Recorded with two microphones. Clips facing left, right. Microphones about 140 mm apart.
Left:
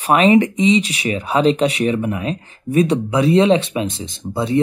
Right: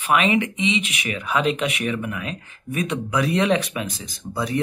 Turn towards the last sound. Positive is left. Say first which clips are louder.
# left 6 dB
turn(degrees=25)  # may be behind; listen again after turning